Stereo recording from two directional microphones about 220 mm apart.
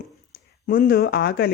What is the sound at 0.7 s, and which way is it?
Speech, 40° left (ahead or behind).